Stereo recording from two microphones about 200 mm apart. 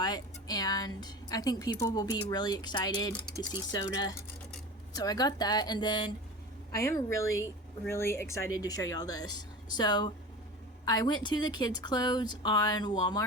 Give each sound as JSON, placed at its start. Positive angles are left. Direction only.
{"t": 0.0, "sound": "a woman's voice", "side_deg": 20}